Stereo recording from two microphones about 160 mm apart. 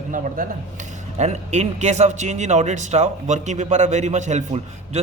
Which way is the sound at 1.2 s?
45° right (ahead or behind).